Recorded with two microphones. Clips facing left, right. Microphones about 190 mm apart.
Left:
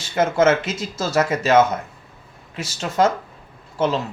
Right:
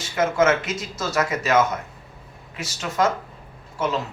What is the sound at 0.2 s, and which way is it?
Speech, 30° left (ahead or behind).